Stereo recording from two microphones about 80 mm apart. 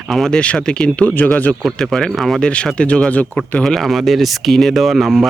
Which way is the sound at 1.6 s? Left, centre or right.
Centre.